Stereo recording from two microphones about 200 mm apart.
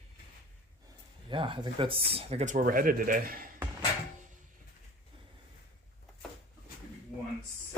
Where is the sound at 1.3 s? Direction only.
25° right (ahead or behind); by 3.4 s 45° right (ahead or behind).